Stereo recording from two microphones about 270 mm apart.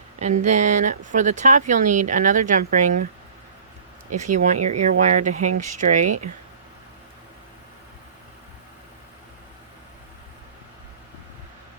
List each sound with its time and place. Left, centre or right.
0.2 s speech: right
4.2 s speech: right
5.3 s speech: right
5.5 s speech: right